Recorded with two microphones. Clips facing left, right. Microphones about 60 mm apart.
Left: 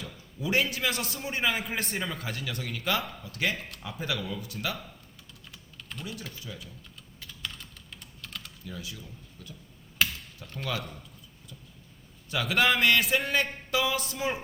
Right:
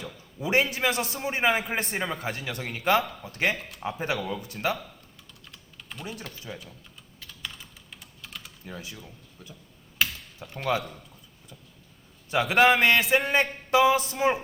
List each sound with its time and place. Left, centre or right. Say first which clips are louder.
0.0 s a man's voice: right 2 dB; right
5.5 s typing: even; centre
6.5 s speech: right 6 dB; right
7.2 s typing: even; centre
8.6 s speech: right 2 dB; right
10.4 s speech: right 3 dB; centre
12.3 s speech: right 5 dB; right
12.8 s a sound: right 3 dB; right
13.1 s speech: right 4 dB; right